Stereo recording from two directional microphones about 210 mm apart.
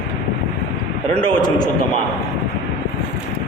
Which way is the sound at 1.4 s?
20° left (ahead or behind).